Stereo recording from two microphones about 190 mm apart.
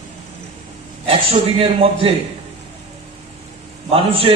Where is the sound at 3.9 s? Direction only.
30° right (ahead or behind).